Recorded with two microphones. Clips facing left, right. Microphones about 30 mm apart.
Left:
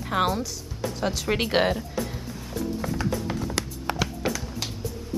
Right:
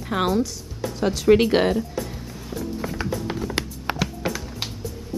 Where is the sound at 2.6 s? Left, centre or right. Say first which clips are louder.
Even; centre.